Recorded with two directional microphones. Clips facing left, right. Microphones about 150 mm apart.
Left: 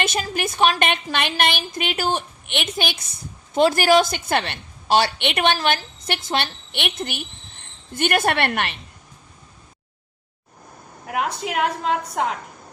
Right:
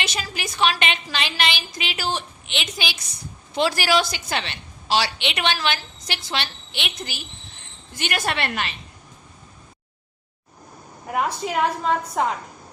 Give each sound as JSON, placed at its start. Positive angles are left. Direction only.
{"t": 0.0, "sound": "a woman's voice", "side_deg": 50}
{"t": 11.2, "sound": "a woman's voice", "side_deg": 60}